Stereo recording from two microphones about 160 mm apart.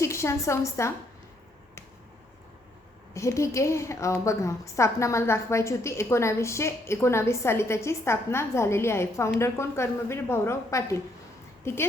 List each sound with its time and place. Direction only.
0.0 s a woman's voice: 20° left (ahead or behind)
3.2 s a woman's voice: 20° left (ahead or behind)